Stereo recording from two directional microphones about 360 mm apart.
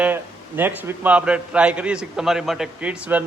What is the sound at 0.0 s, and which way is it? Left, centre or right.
A man's voice, centre.